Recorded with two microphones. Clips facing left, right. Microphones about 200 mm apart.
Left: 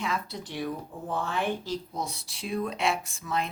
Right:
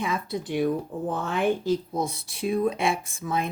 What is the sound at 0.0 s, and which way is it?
Speech, 55° right (ahead or behind).